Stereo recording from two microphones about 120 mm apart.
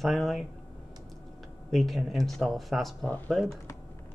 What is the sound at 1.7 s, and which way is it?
Speech, centre (ahead or behind).